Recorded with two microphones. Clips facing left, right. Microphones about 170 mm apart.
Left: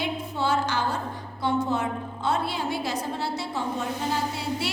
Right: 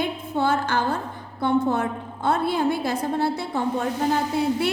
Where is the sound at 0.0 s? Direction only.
55° right (ahead or behind).